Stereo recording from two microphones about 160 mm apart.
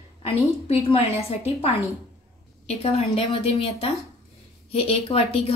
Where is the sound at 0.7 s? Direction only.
35° left (ahead or behind).